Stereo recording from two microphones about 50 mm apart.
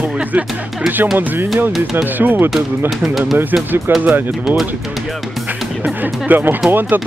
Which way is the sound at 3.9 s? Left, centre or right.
Right.